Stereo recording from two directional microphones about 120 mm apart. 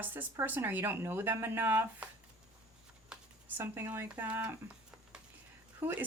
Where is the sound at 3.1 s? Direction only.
15° right (ahead or behind).